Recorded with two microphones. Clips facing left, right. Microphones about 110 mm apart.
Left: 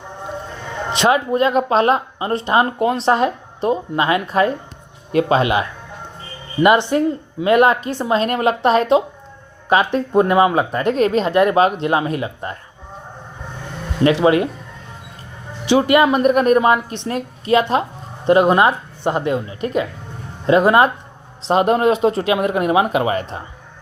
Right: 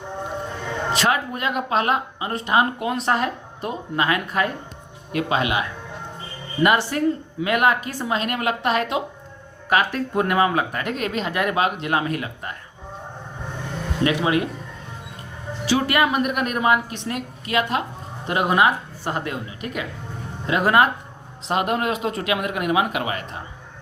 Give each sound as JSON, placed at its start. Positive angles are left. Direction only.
{"t": 0.9, "sound": "speech", "side_deg": 20}
{"t": 6.6, "sound": "speech", "side_deg": 20}
{"t": 14.0, "sound": "speech", "side_deg": 30}
{"t": 15.6, "sound": "speech", "side_deg": 20}
{"t": 19.0, "sound": "speech", "side_deg": 20}
{"t": 19.5, "sound": "speech", "side_deg": 35}